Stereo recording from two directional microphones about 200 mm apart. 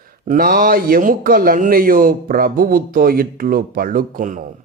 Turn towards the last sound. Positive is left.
turn(degrees=-40)  # may be behind; listen again after turning